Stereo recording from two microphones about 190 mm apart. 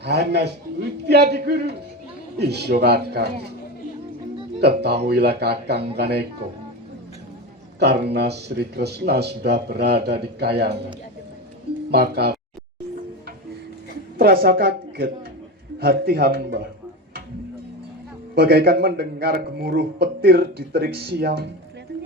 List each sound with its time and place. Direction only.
0.0 s a man's voice: 60° right (ahead or behind)
4.6 s a man's voice: 60° right (ahead or behind)
7.8 s a man's voice: 60° right (ahead or behind)
11.9 s a man's voice: 60° right (ahead or behind)
14.2 s a woman's voice: 50° right (ahead or behind)
18.3 s a man's voice: 55° right (ahead or behind)